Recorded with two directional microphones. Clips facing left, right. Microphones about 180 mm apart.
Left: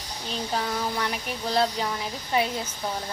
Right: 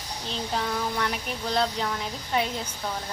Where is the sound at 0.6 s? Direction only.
5° left (ahead or behind).